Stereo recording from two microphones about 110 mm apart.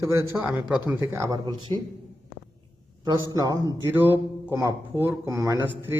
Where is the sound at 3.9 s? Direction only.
20° right (ahead or behind).